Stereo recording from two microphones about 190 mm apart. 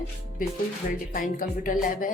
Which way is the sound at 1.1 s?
45° left (ahead or behind).